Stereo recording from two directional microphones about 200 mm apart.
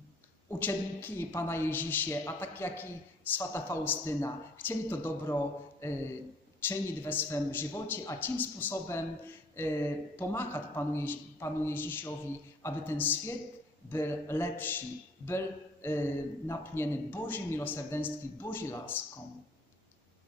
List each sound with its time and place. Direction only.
0.5 s a man's voice: 10° left (ahead or behind)